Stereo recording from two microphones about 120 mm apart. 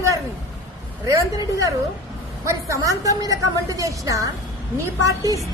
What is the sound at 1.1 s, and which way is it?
A woman's voice, 25° right (ahead or behind).